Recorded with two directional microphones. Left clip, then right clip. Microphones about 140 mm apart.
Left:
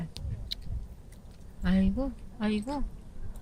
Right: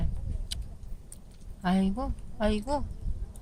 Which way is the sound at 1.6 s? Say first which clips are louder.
Right 1 dB; 30° right (ahead or behind).